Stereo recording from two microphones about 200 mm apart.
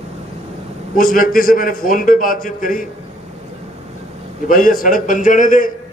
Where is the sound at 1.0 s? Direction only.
45° left (ahead or behind).